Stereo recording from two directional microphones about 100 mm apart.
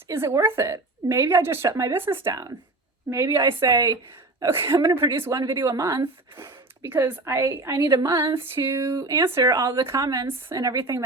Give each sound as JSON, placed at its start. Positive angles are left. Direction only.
{"t": 0.1, "sound": "a woman's voice", "side_deg": -25}
{"t": 3.3, "sound": "a woman's voice", "side_deg": -55}
{"t": 3.7, "sound": "a woman's voice", "side_deg": -40}
{"t": 5.1, "sound": "a woman's voice", "side_deg": -25}
{"t": 6.8, "sound": "a woman's voice", "side_deg": -20}
{"t": 7.9, "sound": "a sound", "side_deg": -45}
{"t": 8.5, "sound": "a woman's voice", "side_deg": -25}
{"t": 9.4, "sound": "a woman's voice", "side_deg": -35}